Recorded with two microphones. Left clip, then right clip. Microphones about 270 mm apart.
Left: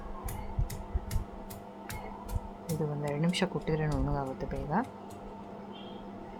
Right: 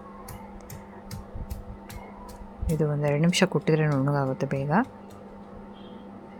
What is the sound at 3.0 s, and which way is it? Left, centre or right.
Speech, centre.